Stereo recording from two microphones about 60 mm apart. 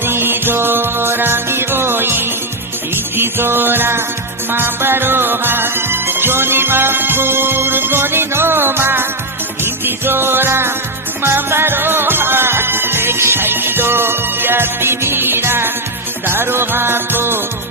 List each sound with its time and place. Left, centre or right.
0.0 s music: right